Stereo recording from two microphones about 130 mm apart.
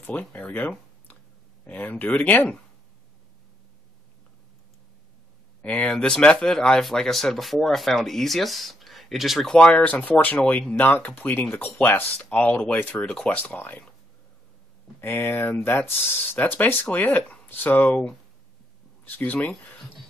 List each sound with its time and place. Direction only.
0.0 s speech: 15° left (ahead or behind)
5.6 s speech: 10° left (ahead or behind)
15.0 s speech: 15° left (ahead or behind)
19.0 s speech: 15° left (ahead or behind)